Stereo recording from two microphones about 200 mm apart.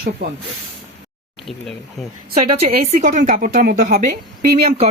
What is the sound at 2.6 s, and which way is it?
A woman's voice, 35° right (ahead or behind).